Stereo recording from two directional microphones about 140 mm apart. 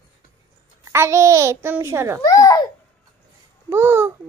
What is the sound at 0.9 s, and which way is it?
A child's voice, 20° right (ahead or behind).